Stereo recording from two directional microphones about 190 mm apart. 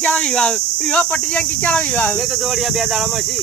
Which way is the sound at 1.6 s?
5° left (ahead or behind).